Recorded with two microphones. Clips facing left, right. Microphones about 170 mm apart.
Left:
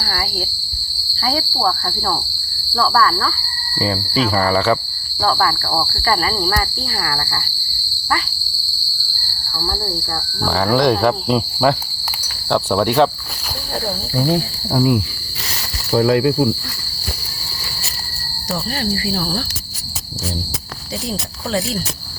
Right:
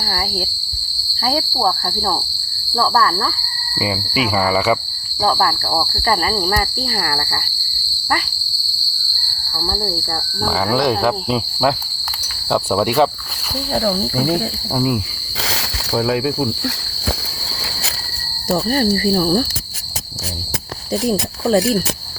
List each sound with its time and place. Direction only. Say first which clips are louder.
0.0 s speech: right 1 dB; 25° right (ahead or behind)
1.2 s speech: right 1 dB; 40° right (ahead or behind)
1.5 s speech: right 1 dB; 25° right (ahead or behind)
3.8 s cricket: left 1 dB; 10° right (ahead or behind)
5.2 s speech: right 1 dB; 20° right (ahead or behind)
7.0 s speech: left 2 dB; 35° right (ahead or behind)
9.6 s speech: right 1 dB; 20° right (ahead or behind)
10.4 s cricket: left 2 dB; 5° right (ahead or behind)
14.3 s cricket: even; centre (ahead or behind)
18.5 s speech: right 6 dB; 50° right (ahead or behind)
21.1 s speech: right 7 dB; 50° right (ahead or behind)